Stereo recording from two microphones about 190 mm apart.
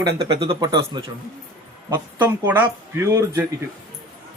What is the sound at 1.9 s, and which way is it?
Speech, 10° right (ahead or behind).